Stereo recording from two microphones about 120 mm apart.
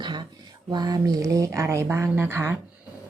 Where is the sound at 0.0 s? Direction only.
40° right (ahead or behind).